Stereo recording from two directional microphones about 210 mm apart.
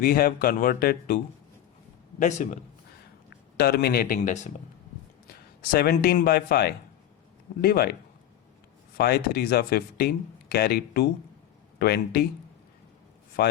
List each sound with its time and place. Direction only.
0.0 s a man's voice: 45° left (ahead or behind)
3.6 s speech: 45° left (ahead or behind)
5.7 s speech: 45° left (ahead or behind)
9.0 s speech: 45° left (ahead or behind)
13.4 s speech: 50° left (ahead or behind)